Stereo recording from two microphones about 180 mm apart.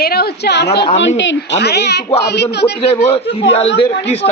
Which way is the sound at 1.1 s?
80° left.